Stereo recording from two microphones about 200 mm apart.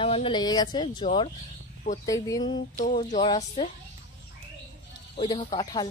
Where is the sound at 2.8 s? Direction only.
40° left (ahead or behind).